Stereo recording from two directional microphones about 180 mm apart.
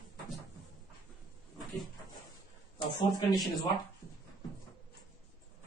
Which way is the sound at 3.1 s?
20° left (ahead or behind).